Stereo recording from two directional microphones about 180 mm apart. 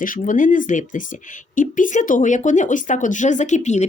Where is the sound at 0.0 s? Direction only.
50° left (ahead or behind).